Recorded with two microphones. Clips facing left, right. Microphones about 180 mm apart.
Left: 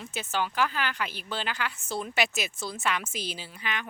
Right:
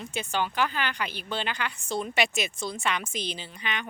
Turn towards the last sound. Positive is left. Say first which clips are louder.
# right 1 dB
turn(degrees=5)  # may be behind; listen again after turning